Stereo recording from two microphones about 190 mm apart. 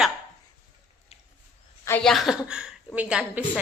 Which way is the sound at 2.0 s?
Centre (ahead or behind).